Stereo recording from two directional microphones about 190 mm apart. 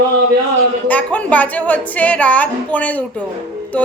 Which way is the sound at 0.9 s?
10° left (ahead or behind).